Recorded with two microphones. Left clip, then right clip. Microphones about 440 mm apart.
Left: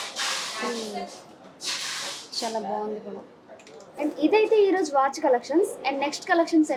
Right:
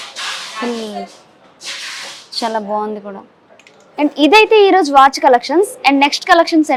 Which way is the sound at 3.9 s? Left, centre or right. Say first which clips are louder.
Right 13 dB; right.